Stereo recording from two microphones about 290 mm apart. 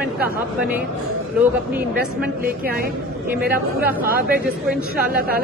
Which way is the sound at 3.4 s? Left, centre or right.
Right.